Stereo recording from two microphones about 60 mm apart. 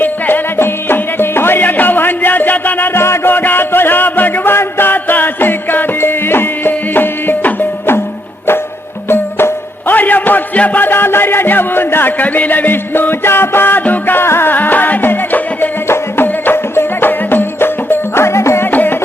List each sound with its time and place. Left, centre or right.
0.0 s music: left
9.0 s music: left
14.2 s music: left
18.7 s music: left